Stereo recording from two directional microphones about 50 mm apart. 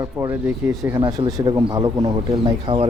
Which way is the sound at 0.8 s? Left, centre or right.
Right.